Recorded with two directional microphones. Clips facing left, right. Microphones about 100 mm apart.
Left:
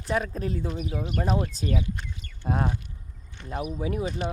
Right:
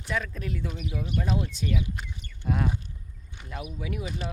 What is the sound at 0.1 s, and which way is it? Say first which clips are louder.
Speech: left 4 dB; 35° left (ahead or behind).